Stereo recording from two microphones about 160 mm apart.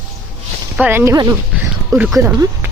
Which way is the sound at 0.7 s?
10° right (ahead or behind).